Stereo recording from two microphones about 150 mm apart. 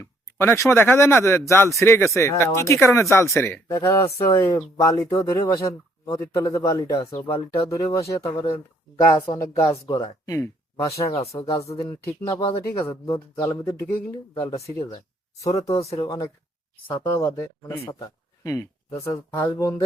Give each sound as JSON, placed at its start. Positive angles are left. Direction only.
{"t": 0.0, "sound": "speech", "side_deg": 15}
{"t": 8.3, "sound": "speech", "side_deg": 35}
{"t": 10.2, "sound": "speech", "side_deg": 20}
{"t": 11.1, "sound": "speech", "side_deg": 45}
{"t": 11.3, "sound": "speech", "side_deg": 20}
{"t": 15.7, "sound": "speech", "side_deg": 40}
{"t": 16.0, "sound": "speech", "side_deg": 20}